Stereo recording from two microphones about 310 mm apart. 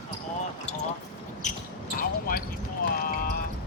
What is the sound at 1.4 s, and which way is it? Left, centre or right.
Basketball bounce, left.